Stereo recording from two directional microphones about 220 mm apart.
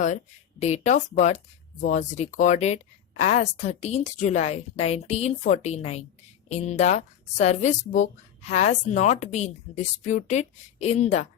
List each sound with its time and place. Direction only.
0.6 s a woman's voice: 30° left (ahead or behind)